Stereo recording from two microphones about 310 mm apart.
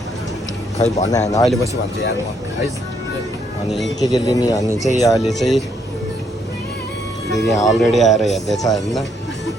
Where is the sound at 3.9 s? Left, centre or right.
Centre.